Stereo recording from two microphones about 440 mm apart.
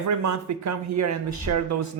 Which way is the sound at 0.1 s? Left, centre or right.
Right.